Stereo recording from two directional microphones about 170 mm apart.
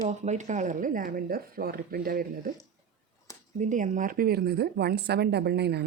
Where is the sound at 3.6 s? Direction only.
45° right (ahead or behind).